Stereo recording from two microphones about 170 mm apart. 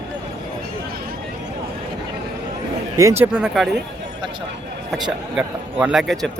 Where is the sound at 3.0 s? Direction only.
20° right (ahead or behind).